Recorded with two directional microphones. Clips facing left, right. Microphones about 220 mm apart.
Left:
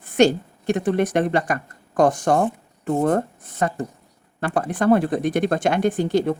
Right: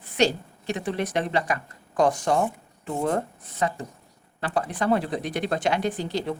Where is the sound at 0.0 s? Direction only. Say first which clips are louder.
Left 6 dB; 50° left (ahead or behind).